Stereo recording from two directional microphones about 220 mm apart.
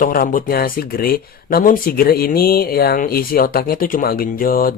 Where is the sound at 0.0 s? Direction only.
40° left (ahead or behind).